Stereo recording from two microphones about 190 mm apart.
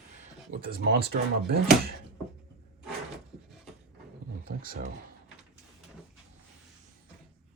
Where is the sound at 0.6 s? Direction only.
55° right (ahead or behind).